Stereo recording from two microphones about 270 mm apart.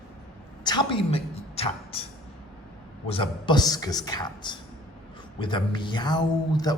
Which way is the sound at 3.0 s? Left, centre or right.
Centre.